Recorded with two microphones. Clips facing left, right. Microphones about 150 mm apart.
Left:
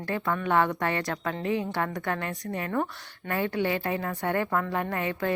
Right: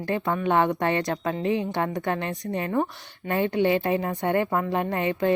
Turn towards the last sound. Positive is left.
turn(degrees=-20)  # may be behind; listen again after turning